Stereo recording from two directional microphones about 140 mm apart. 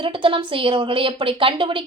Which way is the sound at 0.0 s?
35° right (ahead or behind).